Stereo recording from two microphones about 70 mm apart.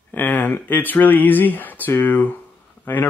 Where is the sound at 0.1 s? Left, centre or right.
Left.